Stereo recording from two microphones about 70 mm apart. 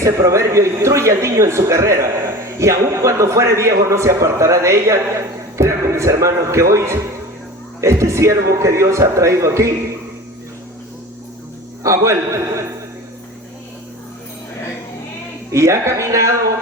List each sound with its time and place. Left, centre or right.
0.0 s a man's voice: right
11.8 s a man's voice: right
15.5 s a man's voice: right